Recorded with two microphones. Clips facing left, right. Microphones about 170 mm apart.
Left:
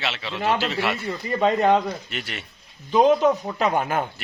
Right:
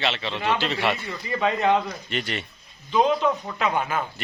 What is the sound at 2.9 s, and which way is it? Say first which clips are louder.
A man's voice: left 4 dB; 45° left (ahead or behind).